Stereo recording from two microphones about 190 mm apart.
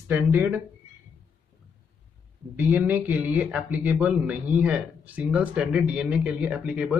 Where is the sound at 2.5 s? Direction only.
10° right (ahead or behind).